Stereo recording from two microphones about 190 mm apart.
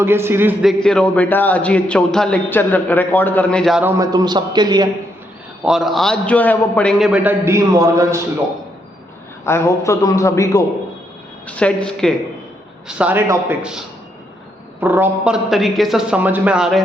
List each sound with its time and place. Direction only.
0.0 s a man's voice: 10° right (ahead or behind)
0.6 s a man's voice: centre (ahead or behind)
3.8 s a man's voice: 15° right (ahead or behind)
5.6 s a man's voice: centre (ahead or behind)
7.1 s a man's voice: 10° right (ahead or behind)
9.5 s a man's voice: 15° left (ahead or behind)
11.4 s a man's voice: 5° left (ahead or behind)
12.9 s a man's voice: 5° right (ahead or behind)